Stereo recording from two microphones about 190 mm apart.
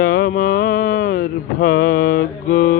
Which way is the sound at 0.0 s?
50° left (ahead or behind).